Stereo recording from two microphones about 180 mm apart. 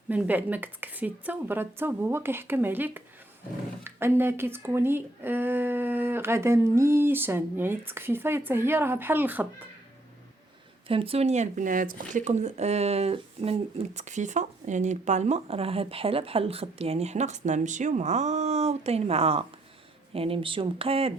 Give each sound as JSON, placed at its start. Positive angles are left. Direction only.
{"t": 0.1, "sound": "speech", "side_deg": -10}
{"t": 10.8, "sound": "speech", "side_deg": -30}